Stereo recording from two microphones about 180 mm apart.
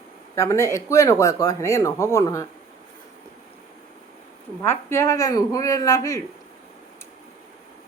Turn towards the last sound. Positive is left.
turn(degrees=20)  # may be behind; listen again after turning